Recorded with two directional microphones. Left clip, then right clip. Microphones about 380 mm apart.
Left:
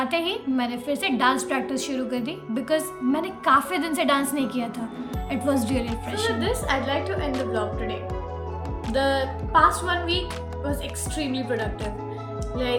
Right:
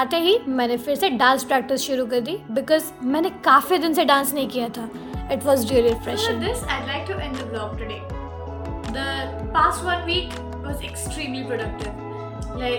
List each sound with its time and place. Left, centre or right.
0.0 s a woman's voice: centre
6.4 s a woman's voice: centre
11.2 s a woman's voice: centre